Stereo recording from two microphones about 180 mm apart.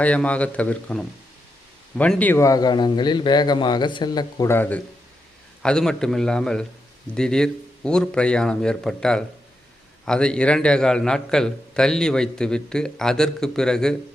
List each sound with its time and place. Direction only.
0.0 s a man's voice: 5° left (ahead or behind)